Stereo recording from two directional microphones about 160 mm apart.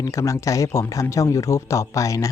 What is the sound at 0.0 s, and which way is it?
Speech, 20° left (ahead or behind).